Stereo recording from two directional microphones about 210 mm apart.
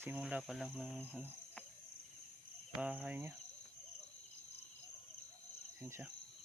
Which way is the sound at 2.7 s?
5° right (ahead or behind).